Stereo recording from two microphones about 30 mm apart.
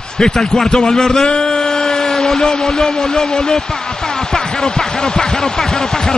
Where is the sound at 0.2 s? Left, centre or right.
Left.